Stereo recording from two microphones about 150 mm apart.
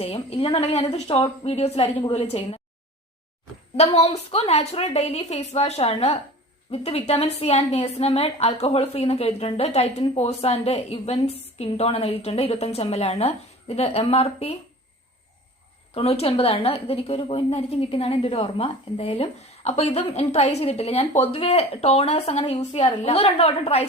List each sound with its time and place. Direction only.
0.0 s a woman's voice: 40° left (ahead or behind)
3.9 s a woman's voice: 45° left (ahead or behind)
16.0 s a woman's voice: 40° left (ahead or behind)